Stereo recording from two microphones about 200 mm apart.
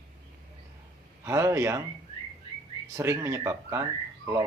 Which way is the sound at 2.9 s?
15° right (ahead or behind).